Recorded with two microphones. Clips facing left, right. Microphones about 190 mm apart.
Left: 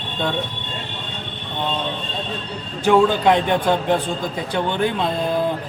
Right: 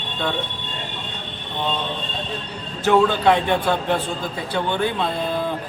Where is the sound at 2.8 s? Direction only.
15° left (ahead or behind).